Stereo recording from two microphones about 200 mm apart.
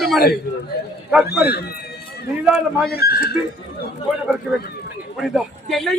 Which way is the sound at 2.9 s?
50° left (ahead or behind).